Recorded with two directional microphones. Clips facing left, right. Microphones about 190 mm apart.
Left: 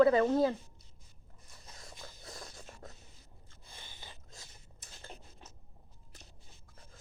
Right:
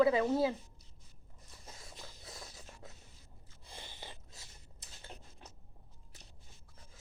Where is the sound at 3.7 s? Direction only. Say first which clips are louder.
Right 4 dB; 30° right (ahead or behind).